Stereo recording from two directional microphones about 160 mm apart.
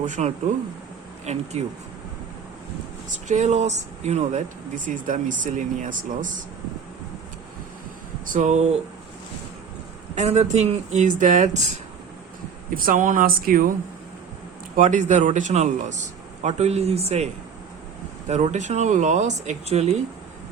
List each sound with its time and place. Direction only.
0.0 s speech: 50° right (ahead or behind)
3.2 s speech: 45° right (ahead or behind)
8.3 s speech: 50° right (ahead or behind)
10.2 s speech: 45° right (ahead or behind)
12.7 s speech: 60° right (ahead or behind)
14.8 s speech: 50° right (ahead or behind)
18.3 s speech: 45° right (ahead or behind)